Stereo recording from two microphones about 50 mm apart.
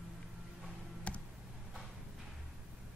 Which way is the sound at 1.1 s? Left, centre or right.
Left.